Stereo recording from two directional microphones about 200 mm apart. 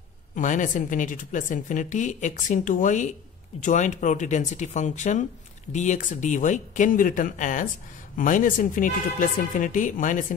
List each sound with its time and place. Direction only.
0.4 s a woman's voice: 40° left (ahead or behind)